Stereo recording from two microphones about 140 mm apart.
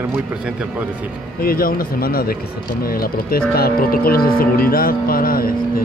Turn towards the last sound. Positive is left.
turn(degrees=90)